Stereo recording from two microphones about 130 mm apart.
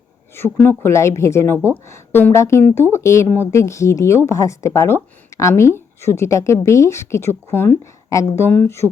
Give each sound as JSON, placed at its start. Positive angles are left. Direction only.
{"t": 0.3, "sound": "speech", "side_deg": 15}